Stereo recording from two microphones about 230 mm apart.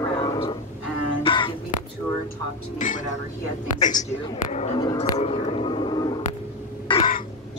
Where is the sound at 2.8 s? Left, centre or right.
Left.